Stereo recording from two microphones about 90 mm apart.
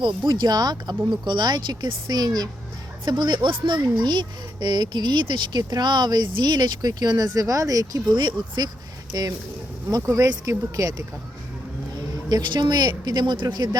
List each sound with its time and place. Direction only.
0.0 s speech: 55° right (ahead or behind)
3.1 s speech: 60° right (ahead or behind); by 8.1 s 40° right (ahead or behind)
8.1 s speech: 55° right (ahead or behind); by 11.0 s 35° right (ahead or behind)
12.3 s speech: 50° right (ahead or behind)